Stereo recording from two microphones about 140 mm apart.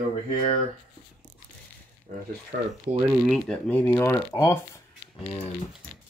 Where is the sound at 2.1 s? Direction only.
80° right.